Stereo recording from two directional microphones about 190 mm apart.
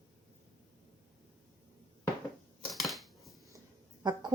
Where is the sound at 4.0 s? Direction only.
20° right (ahead or behind).